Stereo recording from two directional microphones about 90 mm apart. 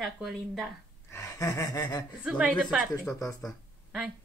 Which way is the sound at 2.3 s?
10° right (ahead or behind).